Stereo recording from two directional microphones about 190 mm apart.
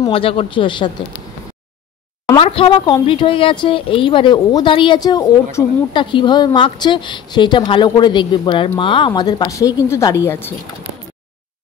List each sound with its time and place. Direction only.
0.0 s speech: 30° left (ahead or behind)
2.2 s speech: 25° left (ahead or behind)